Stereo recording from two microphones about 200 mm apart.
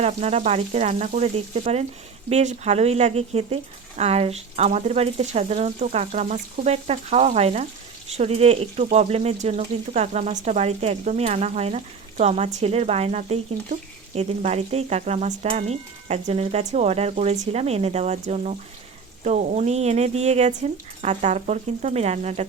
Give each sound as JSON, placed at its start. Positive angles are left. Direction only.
{"t": 0.0, "sound": "speech", "side_deg": -35}